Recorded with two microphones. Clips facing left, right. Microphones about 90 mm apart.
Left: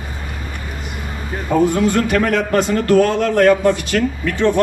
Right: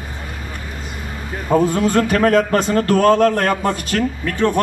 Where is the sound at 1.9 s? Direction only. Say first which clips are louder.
Right 2 dB; 35° right (ahead or behind).